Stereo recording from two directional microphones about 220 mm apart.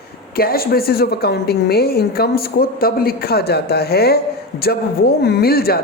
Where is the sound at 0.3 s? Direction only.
45° left (ahead or behind).